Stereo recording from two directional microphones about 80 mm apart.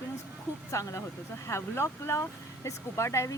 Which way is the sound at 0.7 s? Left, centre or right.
Left.